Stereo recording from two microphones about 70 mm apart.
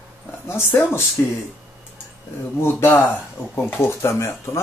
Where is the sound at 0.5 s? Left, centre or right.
Left.